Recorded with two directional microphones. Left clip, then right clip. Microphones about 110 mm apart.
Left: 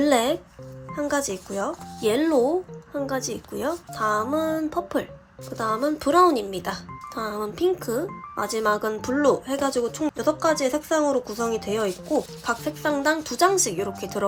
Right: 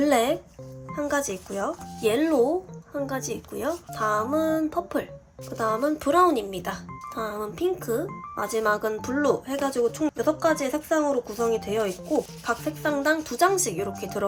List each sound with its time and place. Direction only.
0.0 s music: 15° left (ahead or behind)
0.9 s speech: 15° left (ahead or behind)